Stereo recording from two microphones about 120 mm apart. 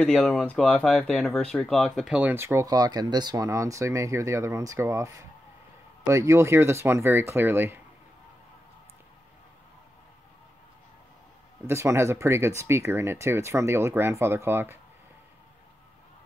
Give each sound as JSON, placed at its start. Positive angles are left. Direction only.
{"t": 0.0, "sound": "speech", "side_deg": 5}
{"t": 2.0, "sound": "speech", "side_deg": -15}
{"t": 11.6, "sound": "speech", "side_deg": -20}